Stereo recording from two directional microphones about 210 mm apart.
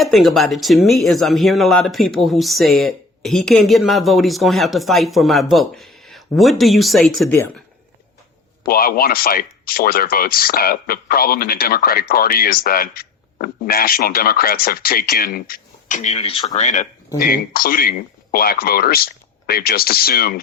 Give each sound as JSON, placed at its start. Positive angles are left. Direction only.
{"t": 0.0, "sound": "speech", "side_deg": 0}
{"t": 8.6, "sound": "speech", "side_deg": 45}
{"t": 17.2, "sound": "speech", "side_deg": 45}